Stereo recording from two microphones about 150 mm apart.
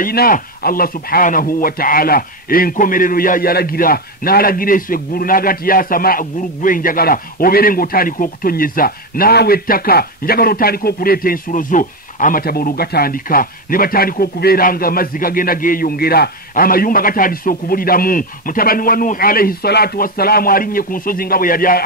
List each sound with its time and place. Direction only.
0.0 s speech: 80° left